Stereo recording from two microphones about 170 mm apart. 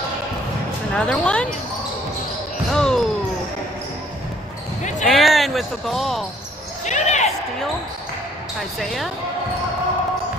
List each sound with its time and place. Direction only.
0.9 s speech: 5° left (ahead or behind)
2.7 s basketball bounce: 5° left (ahead or behind)
5.0 s speech: centre (ahead or behind)
6.8 s basketball bounce: 45° left (ahead or behind)
8.7 s speech: centre (ahead or behind)